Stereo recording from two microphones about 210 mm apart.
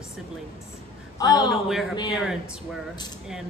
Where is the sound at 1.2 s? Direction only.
15° left (ahead or behind).